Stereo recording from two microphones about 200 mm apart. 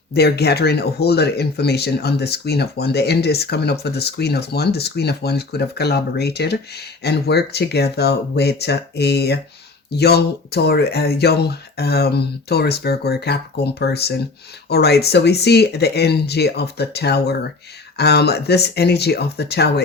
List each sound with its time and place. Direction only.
0.1 s speech: 55° left (ahead or behind)